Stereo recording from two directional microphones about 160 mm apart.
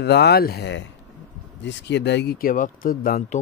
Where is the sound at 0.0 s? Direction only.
90° left; by 3.2 s 65° left (ahead or behind).